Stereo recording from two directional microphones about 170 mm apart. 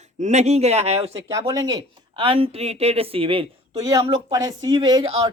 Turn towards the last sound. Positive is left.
turn(degrees=-25)  # may be behind; listen again after turning